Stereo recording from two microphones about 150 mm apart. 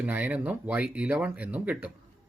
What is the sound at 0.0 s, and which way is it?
Speech, 10° right (ahead or behind).